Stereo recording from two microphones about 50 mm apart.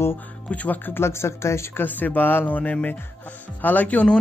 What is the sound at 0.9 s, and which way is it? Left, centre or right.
Speech, left.